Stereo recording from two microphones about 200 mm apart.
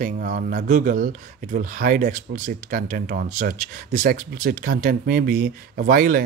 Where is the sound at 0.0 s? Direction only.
45° right (ahead or behind).